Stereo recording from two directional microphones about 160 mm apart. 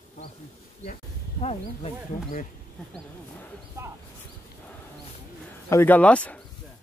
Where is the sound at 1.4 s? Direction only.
40° left (ahead or behind).